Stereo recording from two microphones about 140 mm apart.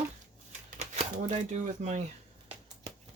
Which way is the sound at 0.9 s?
55° right (ahead or behind).